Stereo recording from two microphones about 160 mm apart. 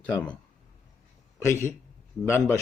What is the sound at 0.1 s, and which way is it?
Speech, 20° left (ahead or behind).